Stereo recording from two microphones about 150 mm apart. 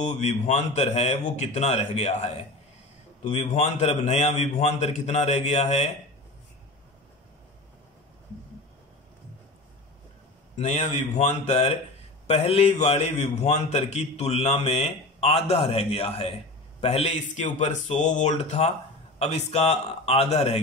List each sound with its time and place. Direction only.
0.0 s a man's voice: 50° left (ahead or behind)
10.5 s a man's voice: 45° left (ahead or behind)